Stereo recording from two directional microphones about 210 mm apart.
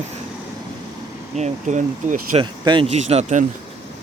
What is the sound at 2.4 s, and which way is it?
Speech, 25° right (ahead or behind).